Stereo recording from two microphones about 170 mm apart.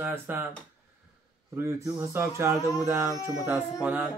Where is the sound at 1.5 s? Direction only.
15° right (ahead or behind).